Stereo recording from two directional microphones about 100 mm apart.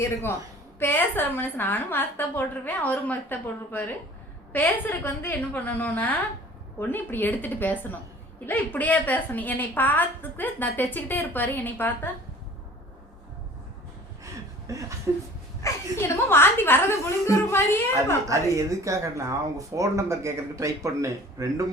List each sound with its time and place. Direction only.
0.0 s a woman's voice: 25° left (ahead or behind)
14.7 s speech: 30° right (ahead or behind)
15.6 s a woman's voice: 25° left (ahead or behind)
18.3 s speech: 30° right (ahead or behind)